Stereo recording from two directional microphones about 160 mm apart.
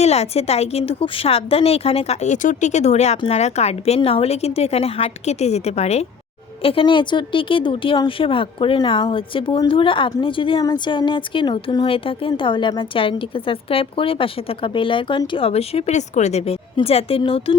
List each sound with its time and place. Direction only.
0.0 s a woman's voice: 40° left (ahead or behind)